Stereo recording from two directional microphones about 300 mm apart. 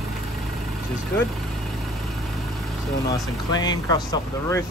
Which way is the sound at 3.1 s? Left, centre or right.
Centre.